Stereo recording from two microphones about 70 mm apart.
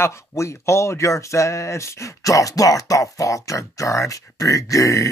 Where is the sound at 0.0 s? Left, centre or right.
Left.